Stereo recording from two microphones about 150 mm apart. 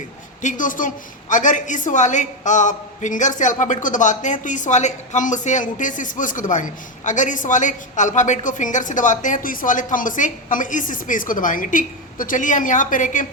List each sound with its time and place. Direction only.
0.4 s a woman's voice: 60° left (ahead or behind)